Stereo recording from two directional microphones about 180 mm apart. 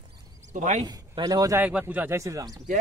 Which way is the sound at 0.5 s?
40° right (ahead or behind).